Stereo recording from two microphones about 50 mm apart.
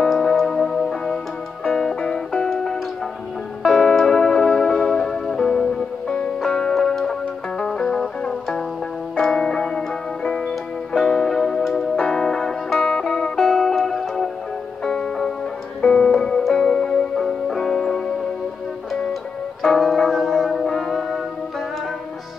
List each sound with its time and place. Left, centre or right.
0.0 s music: centre
6.7 s music: centre
14.9 s music: centre
19.8 s music: centre